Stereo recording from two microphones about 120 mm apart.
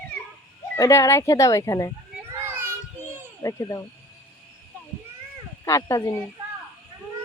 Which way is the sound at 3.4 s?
25° left (ahead or behind).